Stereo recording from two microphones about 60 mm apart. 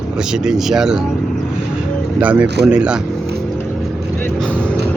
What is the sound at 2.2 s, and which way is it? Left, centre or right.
Speech, right.